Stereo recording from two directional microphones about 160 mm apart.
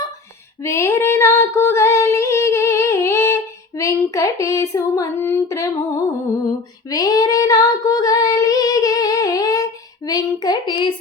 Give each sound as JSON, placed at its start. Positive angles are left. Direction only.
{"t": 0.6, "sound": "female singing", "side_deg": 15}
{"t": 6.9, "sound": "female singing", "side_deg": 25}
{"t": 10.1, "sound": "child singing", "side_deg": 25}